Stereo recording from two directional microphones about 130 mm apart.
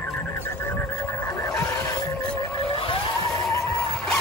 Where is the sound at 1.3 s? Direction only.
25° left (ahead or behind).